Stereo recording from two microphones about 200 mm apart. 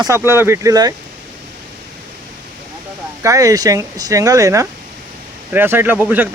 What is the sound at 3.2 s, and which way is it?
Speech, 15° right (ahead or behind).